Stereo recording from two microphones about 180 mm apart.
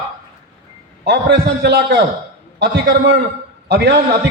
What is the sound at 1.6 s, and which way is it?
A man's voice, 65° right (ahead or behind).